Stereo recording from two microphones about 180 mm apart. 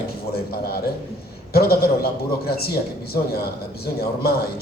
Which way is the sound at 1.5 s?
60° left (ahead or behind).